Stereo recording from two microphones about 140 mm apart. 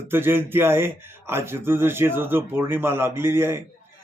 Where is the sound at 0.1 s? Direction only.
15° right (ahead or behind).